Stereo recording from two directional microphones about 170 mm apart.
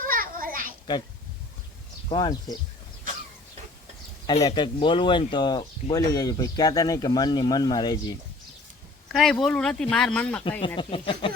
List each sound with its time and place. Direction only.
0.0 s children playing: 55° right (ahead or behind)
2.0 s speech: 25° left (ahead or behind)
4.4 s speech: 25° left (ahead or behind)
9.1 s speech: centre (ahead or behind)
10.8 s speech: 30° left (ahead or behind)